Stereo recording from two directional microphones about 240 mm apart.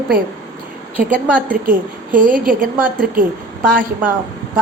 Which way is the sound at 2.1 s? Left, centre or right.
Right.